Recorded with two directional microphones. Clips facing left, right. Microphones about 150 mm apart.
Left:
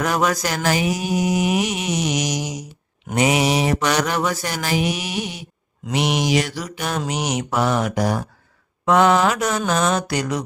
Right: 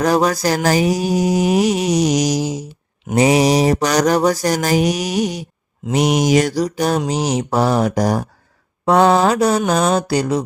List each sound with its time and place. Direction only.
0.0 s mantra: 35° right (ahead or behind)